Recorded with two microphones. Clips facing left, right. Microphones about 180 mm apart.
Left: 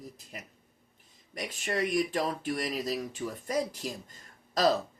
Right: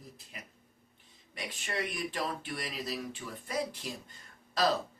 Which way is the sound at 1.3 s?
40° left (ahead or behind).